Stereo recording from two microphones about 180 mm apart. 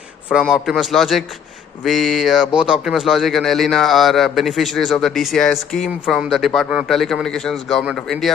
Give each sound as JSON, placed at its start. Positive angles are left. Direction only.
{"t": 0.3, "sound": "a man's voice", "side_deg": -5}